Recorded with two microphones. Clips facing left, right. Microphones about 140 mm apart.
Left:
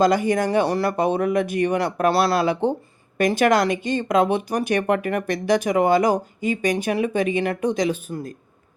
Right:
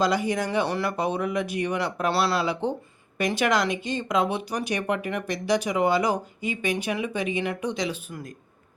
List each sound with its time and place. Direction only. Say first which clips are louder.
0.0 s speech: left 6 dB; 50° left (ahead or behind)